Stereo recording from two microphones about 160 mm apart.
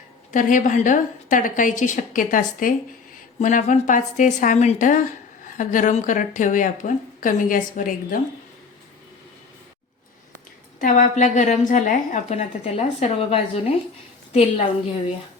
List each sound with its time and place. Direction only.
0.3 s a woman's voice: 55° left (ahead or behind)
10.8 s a woman's voice: 55° left (ahead or behind); by 13.7 s 35° left (ahead or behind)